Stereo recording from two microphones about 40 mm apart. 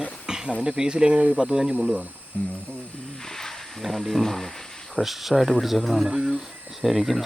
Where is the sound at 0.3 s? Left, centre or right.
Centre.